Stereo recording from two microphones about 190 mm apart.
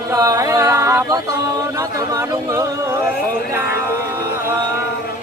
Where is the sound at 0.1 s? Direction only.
15° right (ahead or behind).